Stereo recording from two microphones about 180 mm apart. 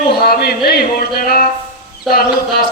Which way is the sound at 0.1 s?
60° left (ahead or behind).